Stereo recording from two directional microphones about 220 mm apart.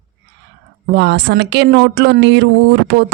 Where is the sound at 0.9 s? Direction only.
50° right (ahead or behind).